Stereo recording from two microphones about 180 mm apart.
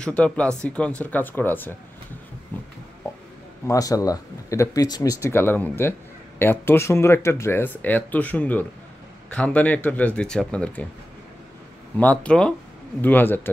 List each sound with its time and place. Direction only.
0.0 s speech: 5° left (ahead or behind)
2.5 s a sound: 10° left (ahead or behind)
3.6 s speech: 20° left (ahead or behind)
12.0 s speech: 5° left (ahead or behind)